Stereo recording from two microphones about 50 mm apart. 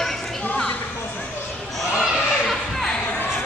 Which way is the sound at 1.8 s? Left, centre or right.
Centre.